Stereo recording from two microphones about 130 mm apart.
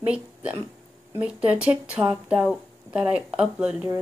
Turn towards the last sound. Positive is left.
turn(degrees=-10)  # may be behind; listen again after turning